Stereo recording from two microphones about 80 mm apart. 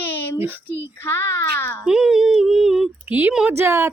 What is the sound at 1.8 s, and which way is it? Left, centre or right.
Speech, centre.